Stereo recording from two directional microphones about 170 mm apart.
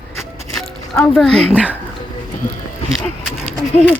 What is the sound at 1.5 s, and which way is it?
Speech, 10° right (ahead or behind).